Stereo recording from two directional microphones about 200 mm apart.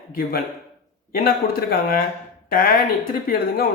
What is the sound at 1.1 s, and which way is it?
A man's voice, 45° left (ahead or behind).